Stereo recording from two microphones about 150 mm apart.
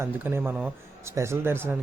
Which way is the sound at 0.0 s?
15° right (ahead or behind).